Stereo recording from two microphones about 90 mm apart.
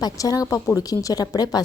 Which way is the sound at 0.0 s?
45° left (ahead or behind).